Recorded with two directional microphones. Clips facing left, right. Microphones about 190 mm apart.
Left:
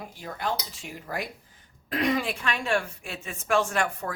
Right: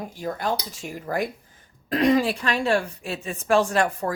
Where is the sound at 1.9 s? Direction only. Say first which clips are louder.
Right 7 dB; 35° right (ahead or behind).